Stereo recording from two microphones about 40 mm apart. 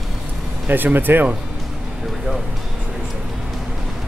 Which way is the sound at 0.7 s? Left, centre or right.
Right.